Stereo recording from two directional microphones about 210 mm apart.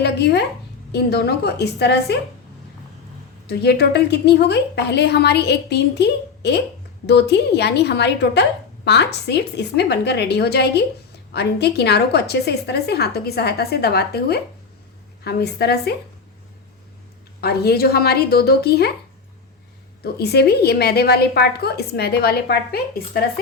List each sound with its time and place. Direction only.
0.0 s a woman's voice: 55° left (ahead or behind)
3.4 s a woman's voice: 50° left (ahead or behind)
17.4 s a woman's voice: 50° left (ahead or behind)
20.1 s a woman's voice: 50° left (ahead or behind)